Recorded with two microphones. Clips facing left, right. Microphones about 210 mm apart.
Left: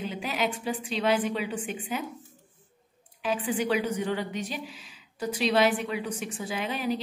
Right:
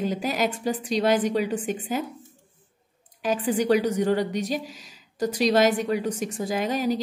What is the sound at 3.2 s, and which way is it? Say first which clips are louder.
A woman's voice: right 4 dB; 40° right (ahead or behind).